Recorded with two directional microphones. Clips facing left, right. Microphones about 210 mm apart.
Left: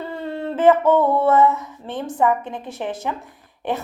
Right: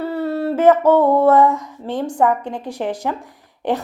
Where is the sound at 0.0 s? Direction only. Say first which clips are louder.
Right 7 dB; 10° right (ahead or behind).